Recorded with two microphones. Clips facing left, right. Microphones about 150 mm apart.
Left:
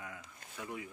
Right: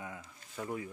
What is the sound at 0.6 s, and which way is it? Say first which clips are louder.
Speech: right 5 dB; 40° right (ahead or behind).